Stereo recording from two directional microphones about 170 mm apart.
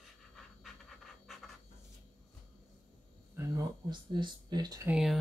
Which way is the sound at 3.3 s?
25° right (ahead or behind).